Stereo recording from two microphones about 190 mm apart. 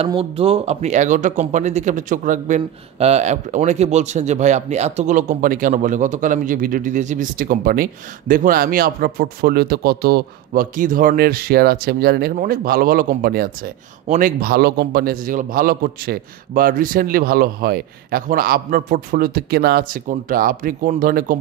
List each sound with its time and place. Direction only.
0.0 s speech: 30° right (ahead or behind); by 21.4 s 50° right (ahead or behind)